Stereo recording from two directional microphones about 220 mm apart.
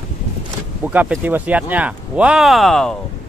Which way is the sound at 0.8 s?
5° right (ahead or behind).